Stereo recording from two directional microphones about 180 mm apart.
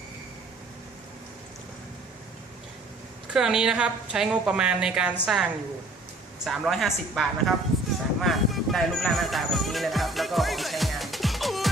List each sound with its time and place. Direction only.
3.2 s a woman's voice: 5° right (ahead or behind)
8.2 s music: centre (ahead or behind)